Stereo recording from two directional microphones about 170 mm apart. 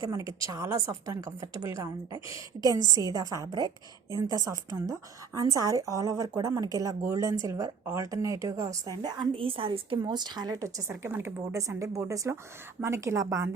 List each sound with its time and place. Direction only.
0.0 s a woman's voice: 20° right (ahead or behind)